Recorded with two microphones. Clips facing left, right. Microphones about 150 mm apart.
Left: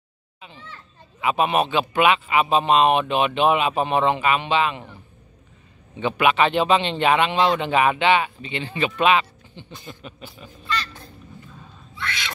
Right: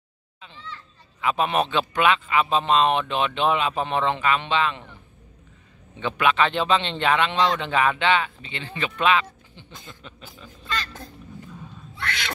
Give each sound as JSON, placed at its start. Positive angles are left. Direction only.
{"t": 1.2, "sound": "speech", "side_deg": 10}
{"t": 10.8, "sound": "duck", "side_deg": -45}